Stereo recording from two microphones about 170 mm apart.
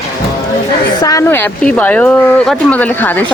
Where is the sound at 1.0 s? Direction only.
20° left (ahead or behind).